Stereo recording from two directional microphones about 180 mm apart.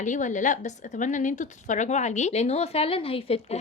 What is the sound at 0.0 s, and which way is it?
A woman's voice, 45° left (ahead or behind).